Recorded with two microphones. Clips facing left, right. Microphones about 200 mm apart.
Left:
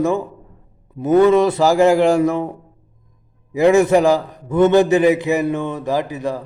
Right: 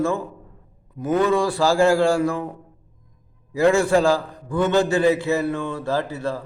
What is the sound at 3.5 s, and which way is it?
A man's voice, 20° left (ahead or behind).